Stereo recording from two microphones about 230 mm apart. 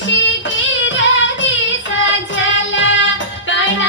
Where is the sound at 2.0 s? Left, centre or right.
Left.